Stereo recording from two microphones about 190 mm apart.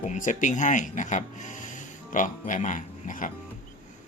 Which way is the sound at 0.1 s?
40° left (ahead or behind).